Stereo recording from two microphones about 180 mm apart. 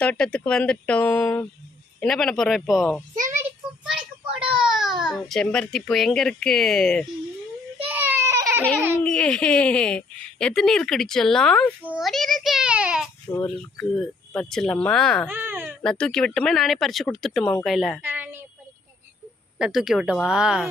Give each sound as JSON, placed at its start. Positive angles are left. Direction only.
{"t": 0.0, "sound": "speech", "side_deg": 5}
{"t": 4.4, "sound": "a child's voice", "side_deg": -5}
{"t": 7.9, "sound": "a sound", "side_deg": -10}
{"t": 9.0, "sound": "a child's voice", "side_deg": 5}
{"t": 13.3, "sound": "speech", "side_deg": 20}
{"t": 13.7, "sound": "speech", "side_deg": 5}
{"t": 15.3, "sound": "speech", "side_deg": -10}
{"t": 15.8, "sound": "speech", "side_deg": 5}
{"t": 18.0, "sound": "a woman's voice", "side_deg": -10}
{"t": 19.5, "sound": "speech", "side_deg": 0}